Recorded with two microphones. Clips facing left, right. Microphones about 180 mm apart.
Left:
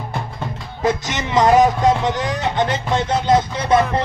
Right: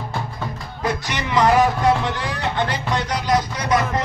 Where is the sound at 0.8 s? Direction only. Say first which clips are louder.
Left 4 dB; 20° left (ahead or behind).